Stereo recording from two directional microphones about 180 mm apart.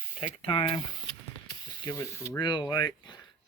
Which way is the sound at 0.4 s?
25° left (ahead or behind).